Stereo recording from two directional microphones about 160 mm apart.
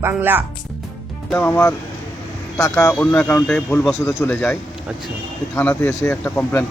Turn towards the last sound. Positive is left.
turn(degrees=15)  # may be behind; listen again after turning